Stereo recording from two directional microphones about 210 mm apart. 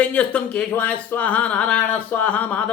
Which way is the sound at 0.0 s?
5° left (ahead or behind).